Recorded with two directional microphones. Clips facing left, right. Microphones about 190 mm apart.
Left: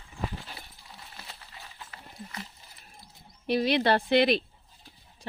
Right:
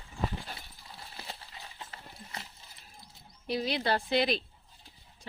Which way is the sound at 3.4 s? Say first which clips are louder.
Left 6 dB; 65° left (ahead or behind).